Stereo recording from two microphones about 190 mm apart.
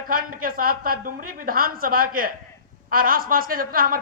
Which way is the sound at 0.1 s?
45° right (ahead or behind).